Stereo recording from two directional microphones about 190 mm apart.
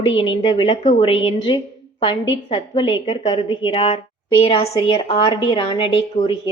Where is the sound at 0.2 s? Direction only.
25° left (ahead or behind).